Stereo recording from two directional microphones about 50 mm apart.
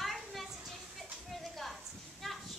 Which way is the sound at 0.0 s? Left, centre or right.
Centre.